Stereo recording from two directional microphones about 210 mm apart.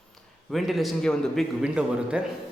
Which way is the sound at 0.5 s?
Centre (ahead or behind).